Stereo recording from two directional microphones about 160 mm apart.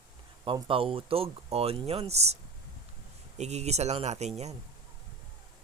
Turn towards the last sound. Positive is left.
turn(degrees=-45)  # may be behind; listen again after turning